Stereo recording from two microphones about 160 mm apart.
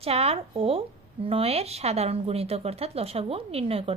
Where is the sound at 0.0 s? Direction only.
40° right (ahead or behind).